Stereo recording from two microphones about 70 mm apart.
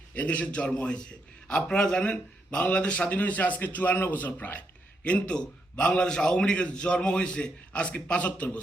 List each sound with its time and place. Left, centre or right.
0.1 s speech: left
5.0 s a man's voice: centre